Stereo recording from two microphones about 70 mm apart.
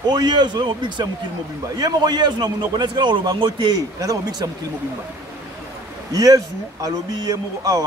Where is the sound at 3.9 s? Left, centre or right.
Right.